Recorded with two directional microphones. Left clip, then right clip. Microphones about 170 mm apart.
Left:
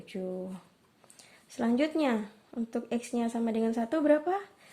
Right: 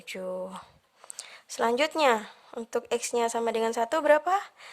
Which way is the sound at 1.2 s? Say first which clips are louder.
Right 7 dB; 45° right (ahead or behind).